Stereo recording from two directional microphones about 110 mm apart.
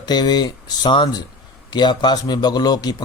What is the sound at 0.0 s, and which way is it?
A man's voice, 40° left (ahead or behind).